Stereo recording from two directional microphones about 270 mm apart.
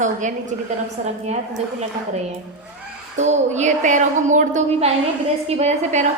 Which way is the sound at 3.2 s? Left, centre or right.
Right.